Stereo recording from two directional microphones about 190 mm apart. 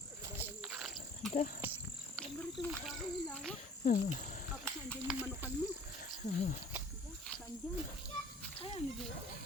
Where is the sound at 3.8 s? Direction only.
40° left (ahead or behind).